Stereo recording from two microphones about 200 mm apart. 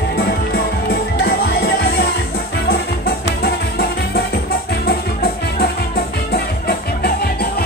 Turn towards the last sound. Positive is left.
turn(degrees=50)  # may be behind; listen again after turning